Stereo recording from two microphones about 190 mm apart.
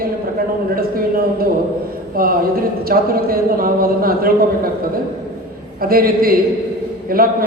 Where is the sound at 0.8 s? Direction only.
50° right (ahead or behind).